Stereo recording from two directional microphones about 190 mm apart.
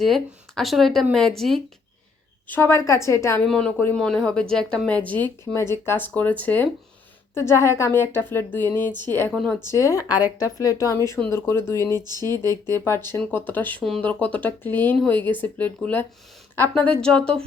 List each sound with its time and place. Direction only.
0.0 s speech: centre (ahead or behind)
2.5 s speech: 10° left (ahead or behind)
3.4 s speech: 5° left (ahead or behind)
11.9 s speech: 20° right (ahead or behind)
12.8 s speech: 15° left (ahead or behind)